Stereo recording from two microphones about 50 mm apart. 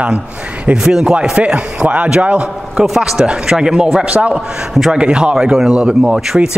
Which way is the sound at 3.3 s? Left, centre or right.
Centre.